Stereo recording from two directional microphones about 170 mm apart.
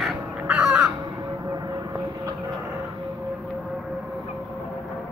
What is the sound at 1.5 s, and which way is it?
Vehicle, 20° right (ahead or behind).